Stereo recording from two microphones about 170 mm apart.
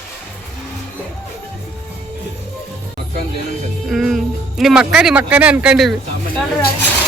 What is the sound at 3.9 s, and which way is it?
Music, centre (ahead or behind).